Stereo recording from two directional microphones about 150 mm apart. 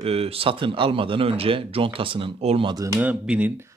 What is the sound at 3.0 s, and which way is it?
Speech, 10° right (ahead or behind).